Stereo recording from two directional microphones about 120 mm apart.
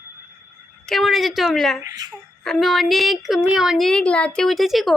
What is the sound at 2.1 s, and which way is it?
A woman's voice, 5° left (ahead or behind).